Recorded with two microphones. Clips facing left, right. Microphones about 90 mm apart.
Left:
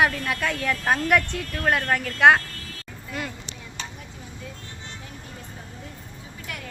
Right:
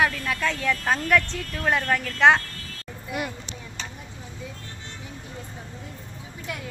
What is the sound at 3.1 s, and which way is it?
Speech, 15° right (ahead or behind).